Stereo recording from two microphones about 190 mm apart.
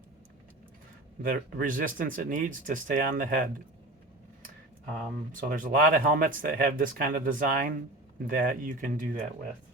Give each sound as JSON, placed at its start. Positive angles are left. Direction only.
{"t": 1.2, "sound": "speech", "side_deg": -45}
{"t": 5.3, "sound": "speech", "side_deg": -45}